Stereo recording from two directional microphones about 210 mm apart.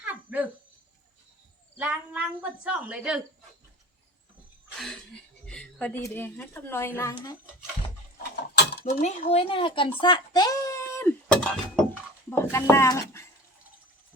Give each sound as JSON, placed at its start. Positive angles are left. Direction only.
{"t": 0.1, "sound": "dog", "side_deg": -5}
{"t": 1.8, "sound": "speech", "side_deg": -5}
{"t": 5.5, "sound": "a woman's voice", "side_deg": 5}
{"t": 8.5, "sound": "mechanisms", "side_deg": 45}
{"t": 9.3, "sound": "a woman's voice", "side_deg": 25}